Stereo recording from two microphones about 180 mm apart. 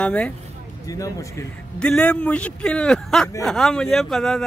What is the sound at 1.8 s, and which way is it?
Speech, 5° left (ahead or behind).